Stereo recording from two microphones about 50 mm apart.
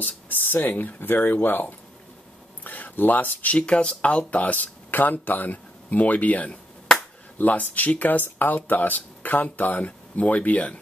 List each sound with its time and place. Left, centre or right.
0.0 s speech: left
2.6 s a sound: left
3.5 s speech: left